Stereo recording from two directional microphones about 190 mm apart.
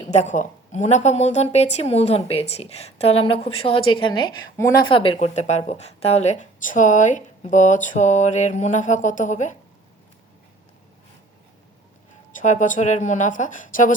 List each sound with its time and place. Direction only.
0.1 s speech: 40° left (ahead or behind)
12.4 s speech: 40° left (ahead or behind)